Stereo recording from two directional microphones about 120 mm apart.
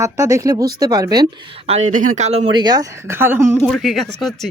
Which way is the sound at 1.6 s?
70° right (ahead or behind).